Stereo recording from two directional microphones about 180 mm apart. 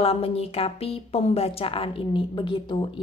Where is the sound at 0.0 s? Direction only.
35° left (ahead or behind).